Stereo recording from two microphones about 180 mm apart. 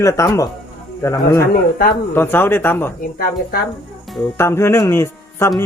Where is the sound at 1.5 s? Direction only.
55° left (ahead or behind).